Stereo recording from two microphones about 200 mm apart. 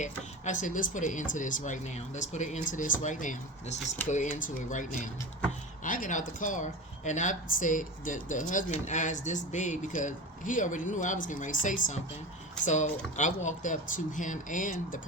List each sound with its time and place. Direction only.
0.0 s speech: 40° left (ahead or behind)